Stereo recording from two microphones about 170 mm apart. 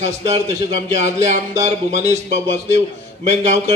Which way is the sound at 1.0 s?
40° right (ahead or behind).